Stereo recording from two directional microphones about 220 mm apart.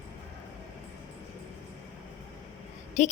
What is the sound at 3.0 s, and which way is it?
Speech, 35° left (ahead or behind).